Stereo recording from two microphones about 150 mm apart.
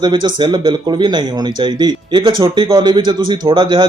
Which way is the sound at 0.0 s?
30° right (ahead or behind).